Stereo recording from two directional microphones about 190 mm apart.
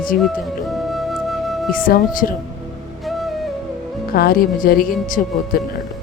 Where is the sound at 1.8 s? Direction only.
45° left (ahead or behind).